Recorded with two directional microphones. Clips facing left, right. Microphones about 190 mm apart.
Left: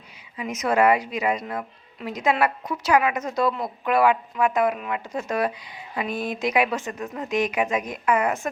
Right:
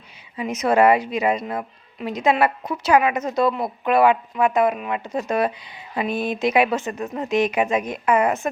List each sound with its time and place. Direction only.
0.3 s a woman's voice: 30° right (ahead or behind)